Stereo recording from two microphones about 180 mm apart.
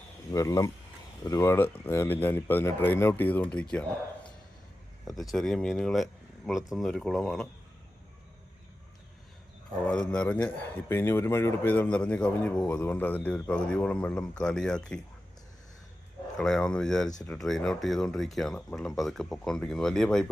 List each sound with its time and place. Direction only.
0.3 s speech: 20° left (ahead or behind)
5.0 s speech: centre (ahead or behind)
9.8 s speech: 5° left (ahead or behind)
16.4 s speech: 5° left (ahead or behind)